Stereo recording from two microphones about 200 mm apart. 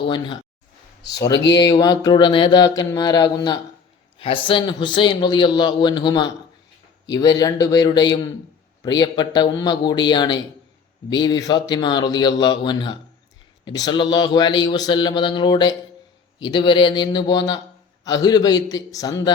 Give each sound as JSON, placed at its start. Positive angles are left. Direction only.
{"t": 0.0, "sound": "speech", "side_deg": 25}
{"t": 1.0, "sound": "speech", "side_deg": 55}
{"t": 1.3, "sound": "speech", "side_deg": 20}